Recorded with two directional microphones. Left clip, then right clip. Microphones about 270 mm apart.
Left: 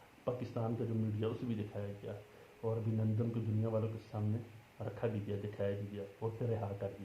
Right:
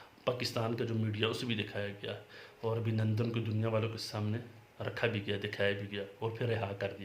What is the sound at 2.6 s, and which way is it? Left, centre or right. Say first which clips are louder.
Speech: right 3 dB; right.